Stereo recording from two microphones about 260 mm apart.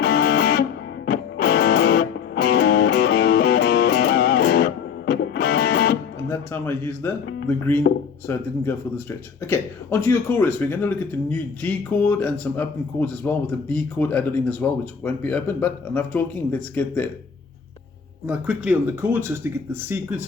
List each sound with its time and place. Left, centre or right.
0.0 s music: left
6.2 s a man's voice: centre
7.9 s speech: left
8.3 s speech: centre
9.5 s speech: centre
18.3 s speech: centre